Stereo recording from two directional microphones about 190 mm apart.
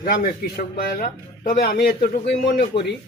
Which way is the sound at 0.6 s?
50° left (ahead or behind).